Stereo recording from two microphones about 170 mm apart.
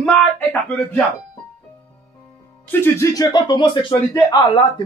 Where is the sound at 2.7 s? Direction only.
15° left (ahead or behind).